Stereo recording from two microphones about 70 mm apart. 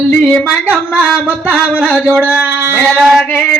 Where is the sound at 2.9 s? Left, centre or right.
Centre.